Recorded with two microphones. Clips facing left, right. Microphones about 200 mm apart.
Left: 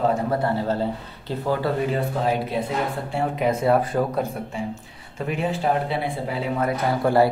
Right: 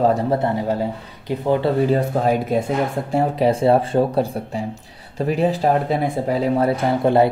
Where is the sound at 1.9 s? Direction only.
45° right (ahead or behind).